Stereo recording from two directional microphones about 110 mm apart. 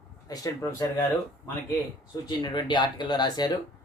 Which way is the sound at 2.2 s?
40° left (ahead or behind).